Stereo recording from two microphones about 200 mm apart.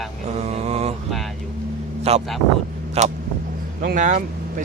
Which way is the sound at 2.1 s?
30° right (ahead or behind).